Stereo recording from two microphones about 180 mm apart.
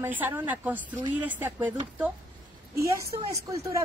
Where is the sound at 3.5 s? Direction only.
15° right (ahead or behind).